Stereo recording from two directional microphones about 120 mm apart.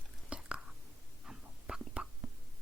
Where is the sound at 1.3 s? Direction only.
5° right (ahead or behind).